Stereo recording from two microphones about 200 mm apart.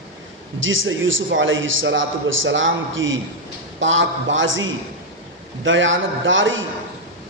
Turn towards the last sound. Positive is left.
turn(degrees=-70)  # may be behind; listen again after turning